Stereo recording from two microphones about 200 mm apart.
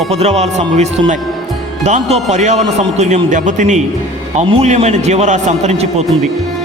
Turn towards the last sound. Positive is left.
turn(degrees=-35)  # may be behind; listen again after turning